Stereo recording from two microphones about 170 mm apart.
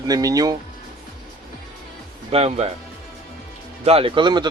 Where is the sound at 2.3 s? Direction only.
40° right (ahead or behind).